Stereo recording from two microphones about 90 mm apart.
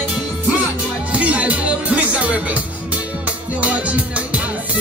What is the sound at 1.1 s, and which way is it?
Music, 15° right (ahead or behind).